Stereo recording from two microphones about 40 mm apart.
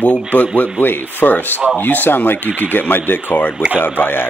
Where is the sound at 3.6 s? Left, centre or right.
Left.